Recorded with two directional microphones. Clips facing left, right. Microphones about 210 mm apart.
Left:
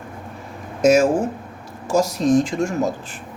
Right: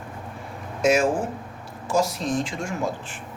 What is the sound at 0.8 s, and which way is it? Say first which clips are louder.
Speech: left 5 dB; 45° left (ahead or behind).